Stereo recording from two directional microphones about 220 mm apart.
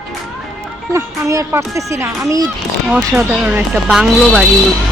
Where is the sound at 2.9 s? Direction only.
5° right (ahead or behind).